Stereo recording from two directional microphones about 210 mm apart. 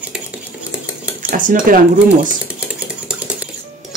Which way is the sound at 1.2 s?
40° right (ahead or behind).